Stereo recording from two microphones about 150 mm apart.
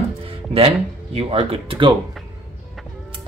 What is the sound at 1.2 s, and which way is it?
Speech, 40° right (ahead or behind).